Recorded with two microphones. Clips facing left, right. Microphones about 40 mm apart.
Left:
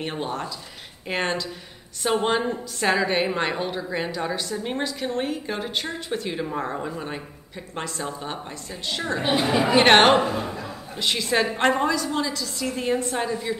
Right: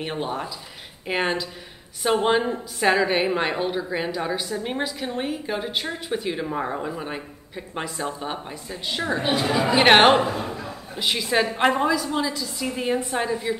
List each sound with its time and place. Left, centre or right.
0.0 s a woman's voice: centre
9.3 s speech: centre
9.8 s a woman's voice: centre